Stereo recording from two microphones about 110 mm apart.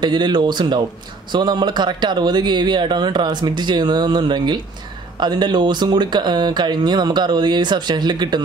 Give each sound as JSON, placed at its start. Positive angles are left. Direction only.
{"t": 0.0, "sound": "speech", "side_deg": -45}